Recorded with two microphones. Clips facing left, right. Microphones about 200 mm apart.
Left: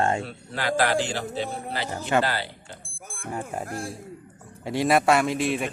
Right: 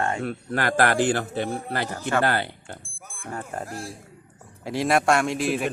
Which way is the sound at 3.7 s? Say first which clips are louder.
Left 2 dB; 55° left (ahead or behind).